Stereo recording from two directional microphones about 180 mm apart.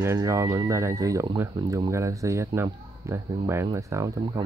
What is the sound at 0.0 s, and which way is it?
Speech, 15° right (ahead or behind).